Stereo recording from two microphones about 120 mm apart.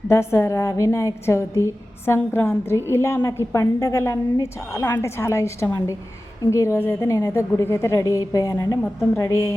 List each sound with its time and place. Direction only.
0.1 s a woman's voice: 25° left (ahead or behind)